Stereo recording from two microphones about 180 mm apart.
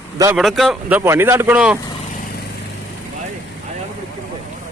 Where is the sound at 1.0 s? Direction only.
15° right (ahead or behind).